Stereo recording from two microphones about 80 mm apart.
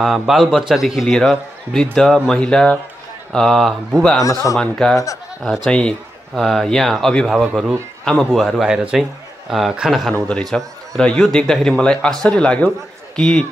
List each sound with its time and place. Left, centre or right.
0.0 s a man's voice: centre
3.3 s a man's voice: centre
4.2 s speech: left
4.6 s a man's voice: centre
5.7 s a man's voice: centre
10.2 s speech: centre